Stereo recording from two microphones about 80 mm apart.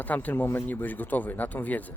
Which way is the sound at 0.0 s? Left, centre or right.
Left.